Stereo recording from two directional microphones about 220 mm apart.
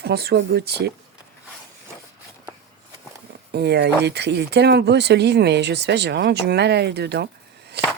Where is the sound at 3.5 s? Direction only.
50° right (ahead or behind).